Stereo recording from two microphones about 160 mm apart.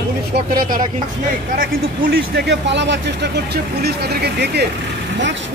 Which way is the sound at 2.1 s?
90° right.